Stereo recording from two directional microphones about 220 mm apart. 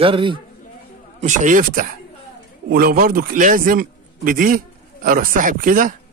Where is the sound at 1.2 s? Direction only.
35° right (ahead or behind).